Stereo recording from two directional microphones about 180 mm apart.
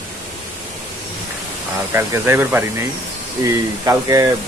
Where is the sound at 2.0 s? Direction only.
15° right (ahead or behind).